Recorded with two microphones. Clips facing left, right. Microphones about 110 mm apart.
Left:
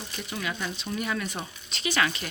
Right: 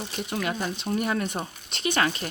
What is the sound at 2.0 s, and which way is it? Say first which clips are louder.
Speech: right 2 dB; 40° right (ahead or behind).